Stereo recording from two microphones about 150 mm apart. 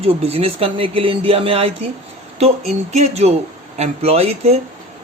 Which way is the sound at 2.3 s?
45° right (ahead or behind).